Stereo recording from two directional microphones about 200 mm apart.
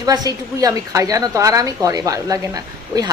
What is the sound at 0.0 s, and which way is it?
A woman's voice, 20° right (ahead or behind).